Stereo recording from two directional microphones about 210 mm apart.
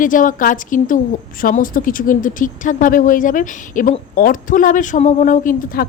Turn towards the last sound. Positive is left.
turn(degrees=40)  # may be behind; listen again after turning